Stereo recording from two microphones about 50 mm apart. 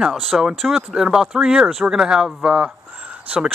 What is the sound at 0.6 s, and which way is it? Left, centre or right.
Speech, centre.